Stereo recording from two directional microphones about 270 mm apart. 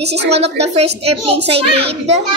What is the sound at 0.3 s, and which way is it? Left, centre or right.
Speech, right.